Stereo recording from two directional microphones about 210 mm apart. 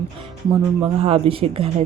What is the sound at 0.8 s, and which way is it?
Speech, 25° right (ahead or behind).